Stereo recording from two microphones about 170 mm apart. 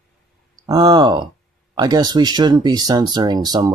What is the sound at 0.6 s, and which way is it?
Speech, 20° right (ahead or behind).